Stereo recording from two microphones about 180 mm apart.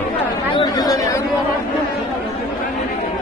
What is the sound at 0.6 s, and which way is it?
Chatter, 20° left (ahead or behind).